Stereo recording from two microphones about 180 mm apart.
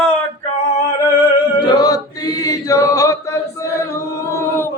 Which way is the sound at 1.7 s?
20° left (ahead or behind).